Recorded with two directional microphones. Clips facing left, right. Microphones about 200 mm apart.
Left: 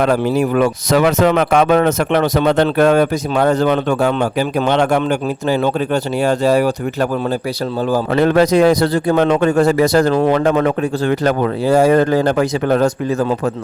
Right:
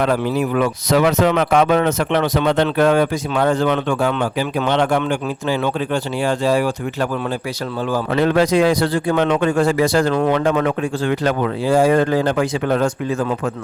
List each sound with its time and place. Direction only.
0.0 s a man's voice: 45° left (ahead or behind)
10.2 s speech: 30° left (ahead or behind)
10.4 s speech: 40° left (ahead or behind)